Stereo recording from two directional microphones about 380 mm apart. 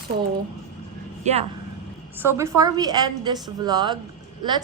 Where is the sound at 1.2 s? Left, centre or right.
Centre.